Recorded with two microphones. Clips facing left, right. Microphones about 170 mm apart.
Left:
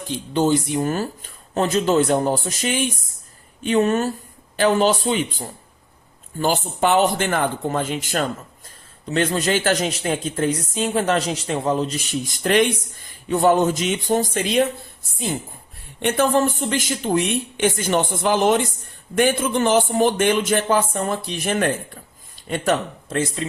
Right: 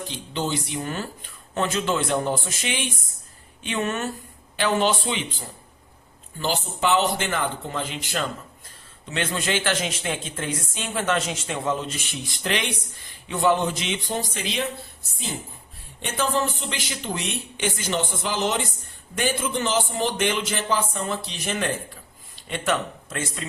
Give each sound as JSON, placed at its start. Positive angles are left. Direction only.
{"t": 0.1, "sound": "a man's voice", "side_deg": 45}
{"t": 6.4, "sound": "a man's voice", "side_deg": 50}
{"t": 16.0, "sound": "a man's voice", "side_deg": 60}
{"t": 23.0, "sound": "a man's voice", "side_deg": 30}